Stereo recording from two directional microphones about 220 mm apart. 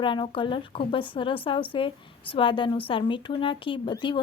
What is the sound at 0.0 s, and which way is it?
Speech, 20° left (ahead or behind).